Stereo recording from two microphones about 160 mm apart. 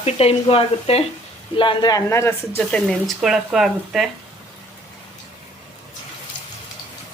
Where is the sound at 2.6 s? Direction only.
5° left (ahead or behind).